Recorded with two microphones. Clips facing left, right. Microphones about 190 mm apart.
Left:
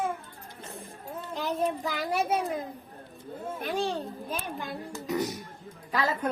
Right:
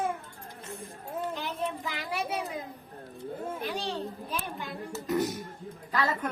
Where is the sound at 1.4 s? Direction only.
40° left (ahead or behind).